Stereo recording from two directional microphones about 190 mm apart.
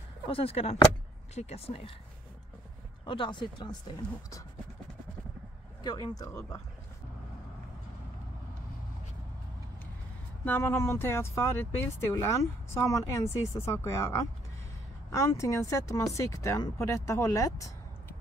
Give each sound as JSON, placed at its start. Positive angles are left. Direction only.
{"t": 0.3, "sound": "speech", "side_deg": 30}
{"t": 3.1, "sound": "speech", "side_deg": 25}
{"t": 5.9, "sound": "speech", "side_deg": 20}
{"t": 10.4, "sound": "speech", "side_deg": 10}